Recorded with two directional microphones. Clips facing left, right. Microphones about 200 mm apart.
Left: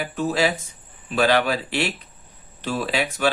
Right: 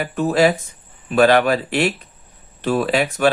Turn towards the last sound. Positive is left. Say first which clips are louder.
# right 5 dB
turn(degrees=-50)  # may be behind; listen again after turning